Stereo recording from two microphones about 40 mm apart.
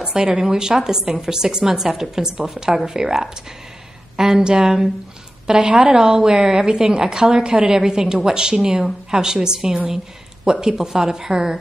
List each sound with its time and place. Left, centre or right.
0.0 s speech: centre
4.3 s a woman's voice: right